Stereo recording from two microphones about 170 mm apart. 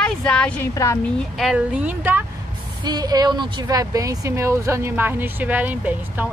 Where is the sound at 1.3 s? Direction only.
5° right (ahead or behind).